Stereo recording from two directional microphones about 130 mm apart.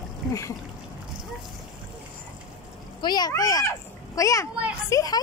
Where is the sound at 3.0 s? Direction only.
30° left (ahead or behind).